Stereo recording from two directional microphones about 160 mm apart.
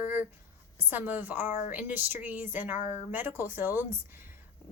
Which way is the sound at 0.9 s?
10° right (ahead or behind).